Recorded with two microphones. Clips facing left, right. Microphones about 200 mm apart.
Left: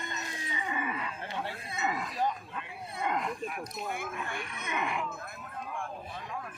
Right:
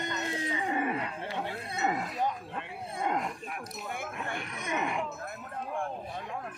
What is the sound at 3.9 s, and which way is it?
Speech, 50° right (ahead or behind).